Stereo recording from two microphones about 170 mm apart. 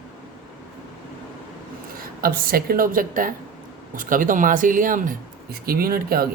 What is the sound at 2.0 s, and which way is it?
A woman's voice, 60° right (ahead or behind).